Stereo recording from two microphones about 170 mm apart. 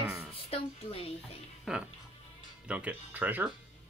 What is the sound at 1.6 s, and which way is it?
Speech, 5° right (ahead or behind).